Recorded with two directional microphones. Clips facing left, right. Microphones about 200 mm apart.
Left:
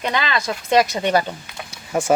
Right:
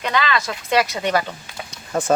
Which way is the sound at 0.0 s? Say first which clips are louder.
Right 1 dB; 20° left (ahead or behind).